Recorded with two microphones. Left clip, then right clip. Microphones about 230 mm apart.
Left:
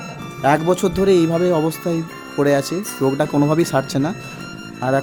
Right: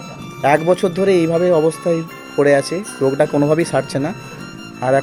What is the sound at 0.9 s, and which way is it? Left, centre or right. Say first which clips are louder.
Speech: right 1 dB; centre.